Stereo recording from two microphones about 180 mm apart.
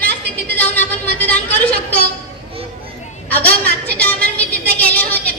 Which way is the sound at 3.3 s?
10° left (ahead or behind).